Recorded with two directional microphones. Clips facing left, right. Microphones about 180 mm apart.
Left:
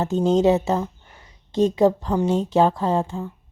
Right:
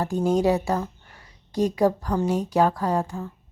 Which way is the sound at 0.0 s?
20° left (ahead or behind).